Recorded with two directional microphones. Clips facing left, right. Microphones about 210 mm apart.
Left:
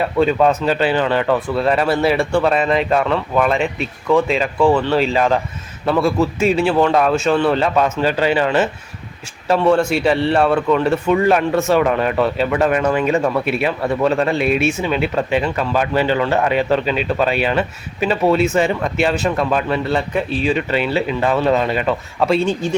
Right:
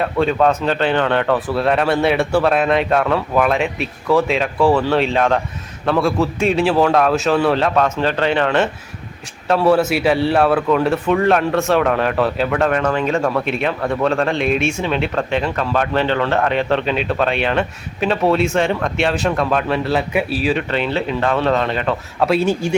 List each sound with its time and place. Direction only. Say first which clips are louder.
0.0 s speech: left 1 dB; 5° left (ahead or behind)